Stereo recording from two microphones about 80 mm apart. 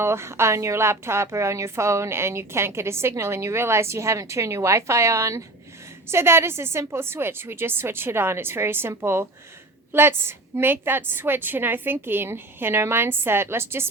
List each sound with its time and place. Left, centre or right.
0.0 s a woman's voice: right